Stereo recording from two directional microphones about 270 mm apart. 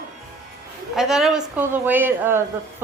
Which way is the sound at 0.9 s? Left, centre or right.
Centre.